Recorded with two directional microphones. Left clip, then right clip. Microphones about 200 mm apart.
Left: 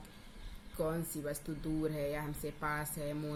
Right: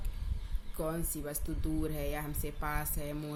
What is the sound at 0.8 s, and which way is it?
Speech, 30° right (ahead or behind).